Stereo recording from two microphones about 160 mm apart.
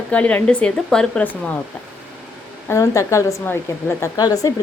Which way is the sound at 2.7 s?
20° left (ahead or behind).